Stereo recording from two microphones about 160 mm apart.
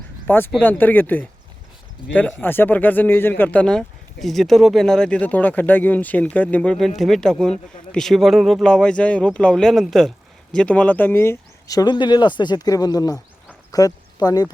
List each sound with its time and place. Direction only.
0.3 s speech: 15° left (ahead or behind)